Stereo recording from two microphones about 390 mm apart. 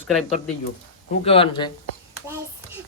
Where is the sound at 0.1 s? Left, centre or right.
Centre.